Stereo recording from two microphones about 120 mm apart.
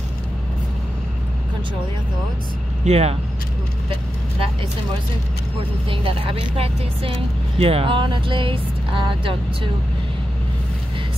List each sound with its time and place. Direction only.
2.8 s speech: 65° right (ahead or behind)
5.9 s speech: 50° right (ahead or behind)